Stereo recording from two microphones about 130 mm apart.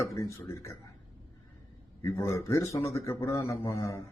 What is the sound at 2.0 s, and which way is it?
Speech, 20° left (ahead or behind).